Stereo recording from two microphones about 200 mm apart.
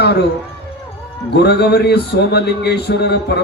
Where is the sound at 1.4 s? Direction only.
55° left (ahead or behind).